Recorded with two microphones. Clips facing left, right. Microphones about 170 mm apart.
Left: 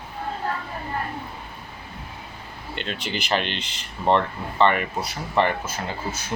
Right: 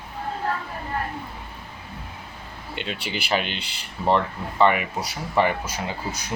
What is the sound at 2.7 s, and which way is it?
Speech, 10° right (ahead or behind).